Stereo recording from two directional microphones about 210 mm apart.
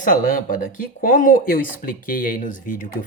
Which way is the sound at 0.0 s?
40° left (ahead or behind).